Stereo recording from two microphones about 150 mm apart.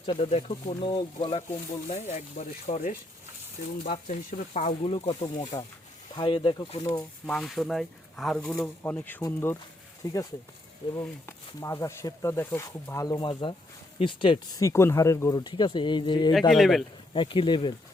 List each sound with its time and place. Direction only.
0.0 s speech: 40° left (ahead or behind)
2.0 s speech: 50° left (ahead or behind)
3.9 s speech: 55° left (ahead or behind); by 6.8 s 35° left (ahead or behind)
7.3 s speech: centre (ahead or behind)
8.5 s speech: 15° left (ahead or behind); by 16.3 s 30° left (ahead or behind)
16.5 s speech: centre (ahead or behind)
17.2 s speech: 35° left (ahead or behind)